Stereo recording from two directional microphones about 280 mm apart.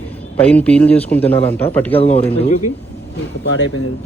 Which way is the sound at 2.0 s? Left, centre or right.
Left.